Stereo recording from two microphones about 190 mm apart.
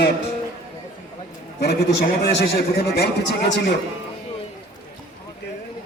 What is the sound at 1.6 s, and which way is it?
A man's voice, 60° left (ahead or behind).